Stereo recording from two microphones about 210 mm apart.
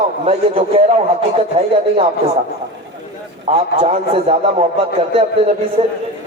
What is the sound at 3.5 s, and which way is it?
A man's voice, 25° right (ahead or behind).